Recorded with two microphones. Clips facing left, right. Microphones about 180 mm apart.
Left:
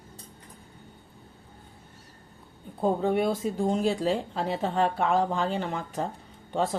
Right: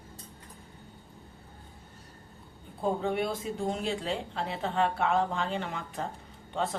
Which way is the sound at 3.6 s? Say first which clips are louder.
Left 7 dB; 40° left (ahead or behind).